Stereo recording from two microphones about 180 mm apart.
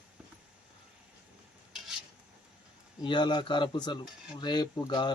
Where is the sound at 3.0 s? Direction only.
25° left (ahead or behind).